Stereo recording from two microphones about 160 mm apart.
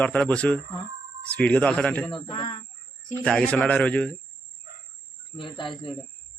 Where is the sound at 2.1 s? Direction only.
30° left (ahead or behind).